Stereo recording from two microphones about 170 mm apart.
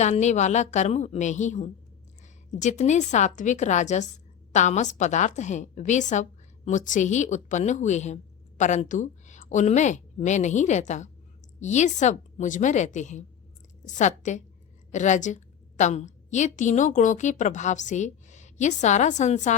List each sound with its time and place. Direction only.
0.0 s a woman's voice: 45° left (ahead or behind)